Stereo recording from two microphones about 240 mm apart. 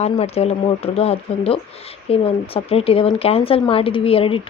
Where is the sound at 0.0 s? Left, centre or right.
Left.